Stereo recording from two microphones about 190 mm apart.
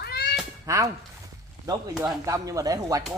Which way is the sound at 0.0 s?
55° left (ahead or behind).